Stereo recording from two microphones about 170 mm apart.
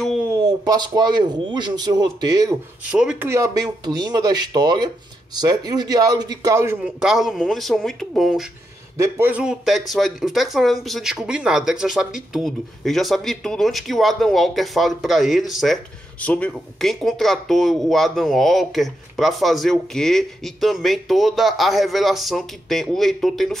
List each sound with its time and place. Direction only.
0.3 s speech: 20° right (ahead or behind)
2.8 s speech: 5° right (ahead or behind)
3.3 s speech: 15° right (ahead or behind); by 8.5 s centre (ahead or behind)
8.9 s speech: 15° right (ahead or behind); by 23.6 s centre (ahead or behind)